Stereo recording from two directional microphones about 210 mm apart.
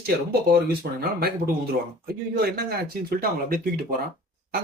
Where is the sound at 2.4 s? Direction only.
45° right (ahead or behind).